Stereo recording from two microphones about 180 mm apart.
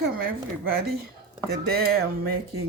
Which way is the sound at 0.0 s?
55° right (ahead or behind).